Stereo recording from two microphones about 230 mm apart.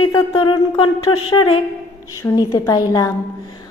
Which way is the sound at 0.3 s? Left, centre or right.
Left.